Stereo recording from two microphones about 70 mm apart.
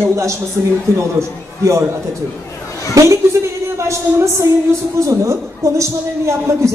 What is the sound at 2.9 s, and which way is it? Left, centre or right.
A woman's voice, right.